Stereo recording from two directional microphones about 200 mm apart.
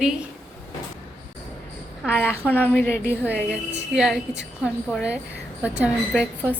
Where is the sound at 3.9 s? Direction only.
Centre (ahead or behind).